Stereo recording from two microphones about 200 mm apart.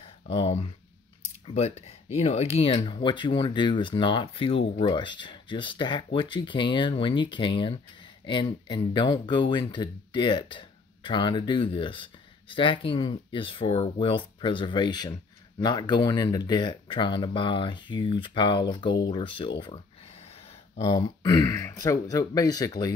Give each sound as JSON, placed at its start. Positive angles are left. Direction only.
{"t": 0.0, "sound": "a sound", "side_deg": 30}
{"t": 1.2, "sound": "speech", "side_deg": 35}
{"t": 20.8, "sound": "speech", "side_deg": 20}